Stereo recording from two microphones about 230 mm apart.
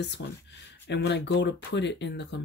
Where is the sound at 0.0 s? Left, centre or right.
Left.